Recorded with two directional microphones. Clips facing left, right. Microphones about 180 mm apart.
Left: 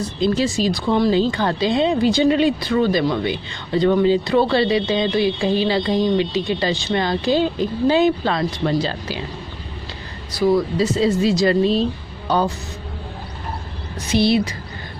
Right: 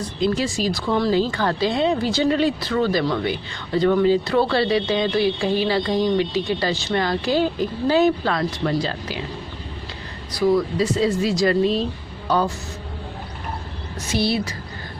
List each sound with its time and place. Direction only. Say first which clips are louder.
0.2 s speech: left 3 dB; 25° left (ahead or behind)
10.4 s speech: left 1 dB; 30° left (ahead or behind)
14.1 s speech: left 5 dB; 20° left (ahead or behind)